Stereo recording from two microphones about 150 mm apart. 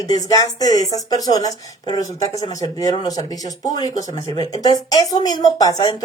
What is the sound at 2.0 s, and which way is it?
Speech, 45° left (ahead or behind).